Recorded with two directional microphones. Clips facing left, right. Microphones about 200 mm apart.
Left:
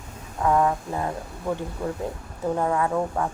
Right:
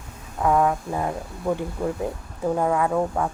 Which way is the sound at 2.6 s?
15° right (ahead or behind).